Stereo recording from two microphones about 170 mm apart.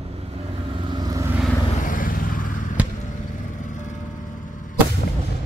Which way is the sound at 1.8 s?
55° left (ahead or behind).